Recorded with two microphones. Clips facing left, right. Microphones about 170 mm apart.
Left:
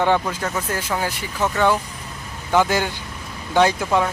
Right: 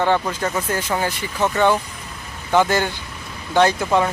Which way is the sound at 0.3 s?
Centre (ahead or behind).